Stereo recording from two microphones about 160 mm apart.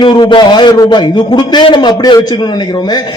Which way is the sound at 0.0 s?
30° left (ahead or behind).